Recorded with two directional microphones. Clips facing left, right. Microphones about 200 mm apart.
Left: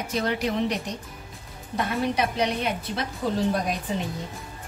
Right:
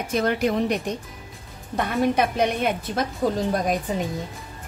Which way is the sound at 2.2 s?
50° right (ahead or behind).